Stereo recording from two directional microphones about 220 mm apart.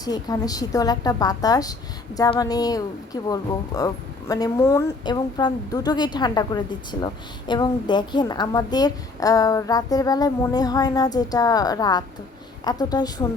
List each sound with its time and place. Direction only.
0.0 s a woman's voice: 15° left (ahead or behind)